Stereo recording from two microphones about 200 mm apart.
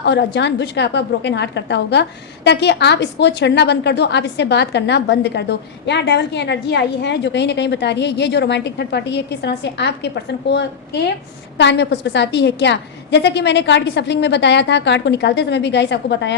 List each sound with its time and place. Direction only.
0.0 s a woman's voice: 60° left (ahead or behind)